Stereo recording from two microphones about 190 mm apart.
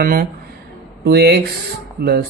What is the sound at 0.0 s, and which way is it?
Speech, 50° right (ahead or behind).